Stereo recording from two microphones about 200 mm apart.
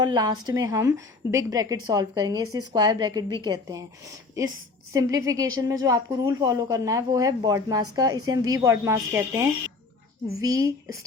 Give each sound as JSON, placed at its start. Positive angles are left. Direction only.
{"t": 0.0, "sound": "a woman's voice", "side_deg": -20}